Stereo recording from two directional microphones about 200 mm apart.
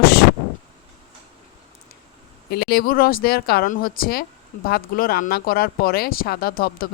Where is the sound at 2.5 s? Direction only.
50° left (ahead or behind).